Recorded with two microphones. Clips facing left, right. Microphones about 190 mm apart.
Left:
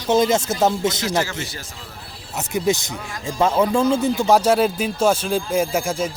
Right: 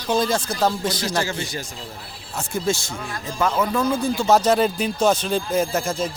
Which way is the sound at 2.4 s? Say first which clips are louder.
Left 3 dB; 20° left (ahead or behind).